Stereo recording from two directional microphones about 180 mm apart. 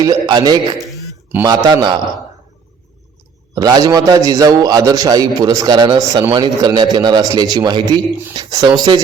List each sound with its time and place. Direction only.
0.0 s a man's voice: 20° right (ahead or behind)
3.5 s a man's voice: 20° right (ahead or behind)